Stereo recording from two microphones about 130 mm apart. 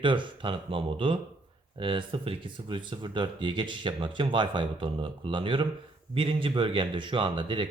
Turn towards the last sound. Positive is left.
turn(degrees=-40)  # may be behind; listen again after turning